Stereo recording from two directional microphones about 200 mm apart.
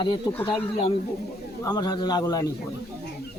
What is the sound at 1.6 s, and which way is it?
Speech, 20° left (ahead or behind).